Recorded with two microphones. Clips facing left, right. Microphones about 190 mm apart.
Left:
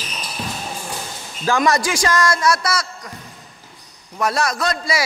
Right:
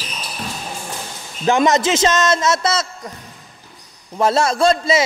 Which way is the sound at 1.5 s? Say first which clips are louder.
Right 3 dB; 20° right (ahead or behind).